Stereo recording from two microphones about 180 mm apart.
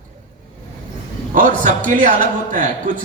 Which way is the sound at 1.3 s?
45° right (ahead or behind).